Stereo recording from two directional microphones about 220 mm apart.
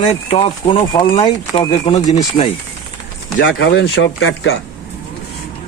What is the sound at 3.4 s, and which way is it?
Speech, 50° left (ahead or behind).